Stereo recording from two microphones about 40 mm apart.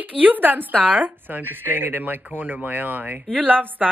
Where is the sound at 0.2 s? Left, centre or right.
Right.